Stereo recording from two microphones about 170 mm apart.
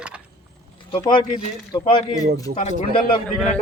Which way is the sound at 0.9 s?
25° left (ahead or behind).